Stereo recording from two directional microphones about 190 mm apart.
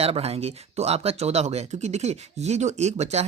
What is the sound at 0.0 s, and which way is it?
Speech, 30° right (ahead or behind).